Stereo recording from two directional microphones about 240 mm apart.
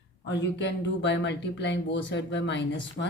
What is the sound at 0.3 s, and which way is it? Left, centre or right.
Speech, left.